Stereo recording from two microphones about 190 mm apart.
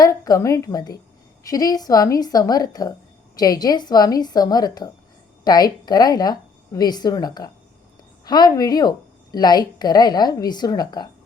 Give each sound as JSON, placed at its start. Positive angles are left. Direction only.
{"t": 0.0, "sound": "a woman's voice", "side_deg": 20}